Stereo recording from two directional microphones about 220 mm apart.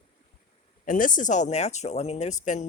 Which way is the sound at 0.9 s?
35° left (ahead or behind).